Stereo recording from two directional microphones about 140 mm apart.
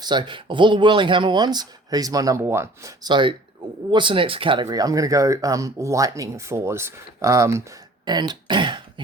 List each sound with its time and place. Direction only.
0.0 s speech: 30° right (ahead or behind)
4.6 s speech: 25° right (ahead or behind)
8.0 s speech: 30° right (ahead or behind)